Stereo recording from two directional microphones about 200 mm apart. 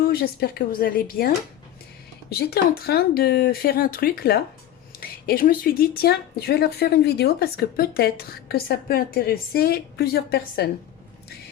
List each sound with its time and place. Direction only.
0.0 s speech: 50° left (ahead or behind)
2.3 s speech: 50° left (ahead or behind)